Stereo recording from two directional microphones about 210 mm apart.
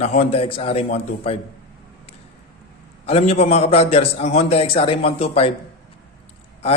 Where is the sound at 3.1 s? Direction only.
30° left (ahead or behind).